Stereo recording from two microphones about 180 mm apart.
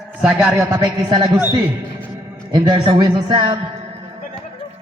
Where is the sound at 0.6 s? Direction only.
25° right (ahead or behind).